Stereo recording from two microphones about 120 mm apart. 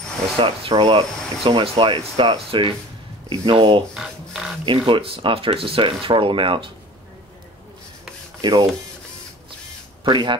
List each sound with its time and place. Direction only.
0.4 s speech: 45° right (ahead or behind)
3.9 s speech: 5° right (ahead or behind)
4.6 s speech: 45° right (ahead or behind)
8.4 s speech: 40° right (ahead or behind)
10.0 s speech: 40° right (ahead or behind)